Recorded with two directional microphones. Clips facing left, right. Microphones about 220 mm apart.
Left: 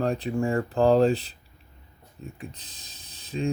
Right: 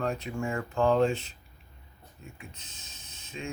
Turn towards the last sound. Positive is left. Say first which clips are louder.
# left 10 dB
turn(degrees=35)  # may be behind; listen again after turning